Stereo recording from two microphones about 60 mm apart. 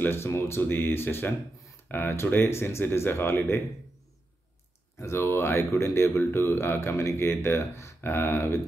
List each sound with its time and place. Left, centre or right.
0.0 s speech: left
4.9 s speech: left